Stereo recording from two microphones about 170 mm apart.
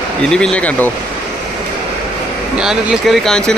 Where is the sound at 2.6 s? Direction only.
Centre (ahead or behind).